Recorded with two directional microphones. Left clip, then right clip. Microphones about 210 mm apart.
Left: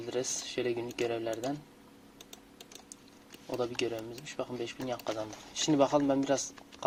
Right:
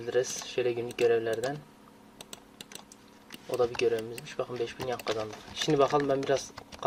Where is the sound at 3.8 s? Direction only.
20° left (ahead or behind).